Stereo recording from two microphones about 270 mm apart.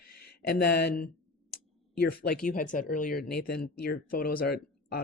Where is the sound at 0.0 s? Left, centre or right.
Left.